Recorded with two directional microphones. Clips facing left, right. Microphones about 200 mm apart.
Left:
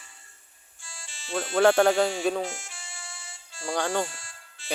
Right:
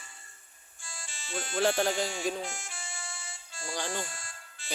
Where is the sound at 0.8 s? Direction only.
50° right (ahead or behind).